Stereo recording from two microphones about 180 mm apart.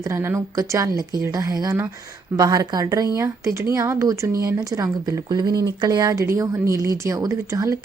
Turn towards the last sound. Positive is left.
turn(degrees=-20)  # may be behind; listen again after turning